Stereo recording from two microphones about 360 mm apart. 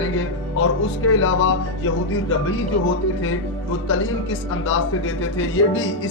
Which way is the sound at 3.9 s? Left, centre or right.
Left.